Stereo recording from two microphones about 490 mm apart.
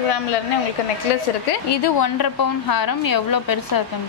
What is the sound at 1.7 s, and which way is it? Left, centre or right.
A woman's voice, left.